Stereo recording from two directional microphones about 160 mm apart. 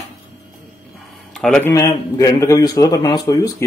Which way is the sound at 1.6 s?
20° left (ahead or behind).